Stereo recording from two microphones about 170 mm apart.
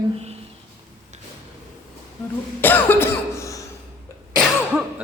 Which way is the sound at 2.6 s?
10° left (ahead or behind).